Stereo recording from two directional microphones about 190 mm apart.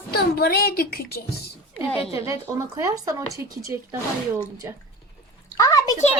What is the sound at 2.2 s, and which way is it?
Speech, 15° right (ahead or behind).